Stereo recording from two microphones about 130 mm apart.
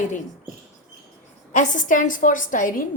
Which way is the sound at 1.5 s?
75° left (ahead or behind).